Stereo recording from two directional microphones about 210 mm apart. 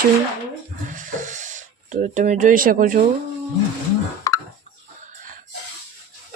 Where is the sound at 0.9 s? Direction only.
35° right (ahead or behind).